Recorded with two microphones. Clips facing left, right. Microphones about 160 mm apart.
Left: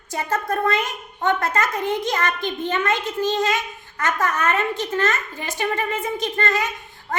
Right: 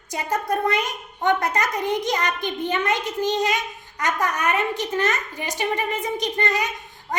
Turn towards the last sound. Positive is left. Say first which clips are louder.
# left 1 dB
turn(degrees=-15)  # may be behind; listen again after turning